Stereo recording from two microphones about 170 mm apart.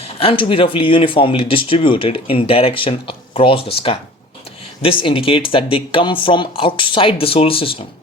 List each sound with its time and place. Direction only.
0.0 s speech: 35° left (ahead or behind)